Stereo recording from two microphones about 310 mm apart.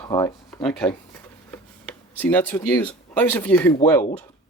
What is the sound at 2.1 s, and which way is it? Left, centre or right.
Speech, centre.